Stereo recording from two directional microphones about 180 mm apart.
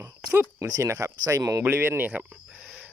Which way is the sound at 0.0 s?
15° right (ahead or behind).